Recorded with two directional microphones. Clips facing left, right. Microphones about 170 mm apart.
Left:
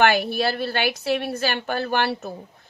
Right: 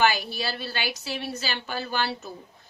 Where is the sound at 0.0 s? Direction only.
60° left (ahead or behind).